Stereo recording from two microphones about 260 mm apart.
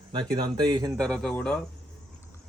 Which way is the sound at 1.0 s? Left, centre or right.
Centre.